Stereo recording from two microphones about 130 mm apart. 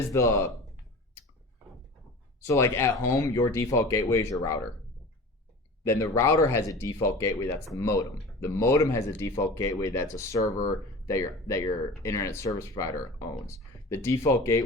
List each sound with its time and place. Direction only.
0.1 s speech: 20° left (ahead or behind)
2.4 s speech: 20° left (ahead or behind)
5.8 s speech: 20° left (ahead or behind)